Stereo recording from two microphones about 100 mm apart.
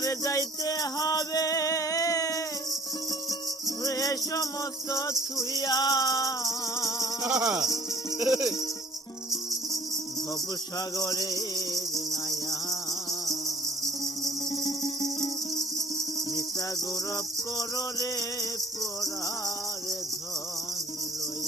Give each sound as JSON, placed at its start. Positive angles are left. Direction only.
{"t": 0.0, "sound": "music", "side_deg": 35}
{"t": 3.8, "sound": "music", "side_deg": 35}
{"t": 7.2, "sound": "speech", "side_deg": -10}
{"t": 10.8, "sound": "music", "side_deg": 40}
{"t": 14.0, "sound": "music", "side_deg": 40}
{"t": 17.6, "sound": "music", "side_deg": 40}